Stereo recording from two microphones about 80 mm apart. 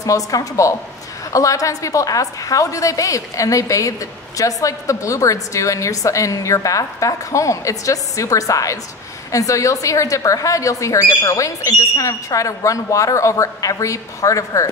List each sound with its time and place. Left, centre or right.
0.0 s speech: left